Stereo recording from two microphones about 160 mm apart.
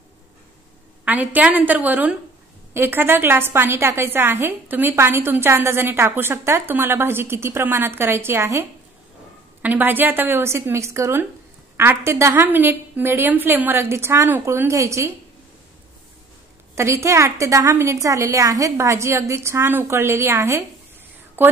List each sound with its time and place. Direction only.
1.0 s a woman's voice: 10° right (ahead or behind)
16.7 s a woman's voice: 15° right (ahead or behind)